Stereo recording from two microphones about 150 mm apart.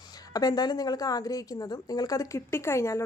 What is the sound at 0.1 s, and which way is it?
A woman's voice, 25° left (ahead or behind).